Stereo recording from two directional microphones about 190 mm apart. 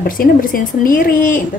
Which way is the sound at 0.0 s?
50° left (ahead or behind).